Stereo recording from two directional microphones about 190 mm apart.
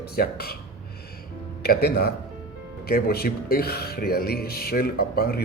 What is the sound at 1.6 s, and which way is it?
Speech, 55° left (ahead or behind).